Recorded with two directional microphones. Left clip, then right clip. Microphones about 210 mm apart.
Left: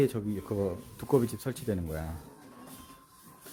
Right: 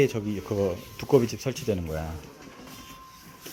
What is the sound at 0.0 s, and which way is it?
Speech, 15° left (ahead or behind).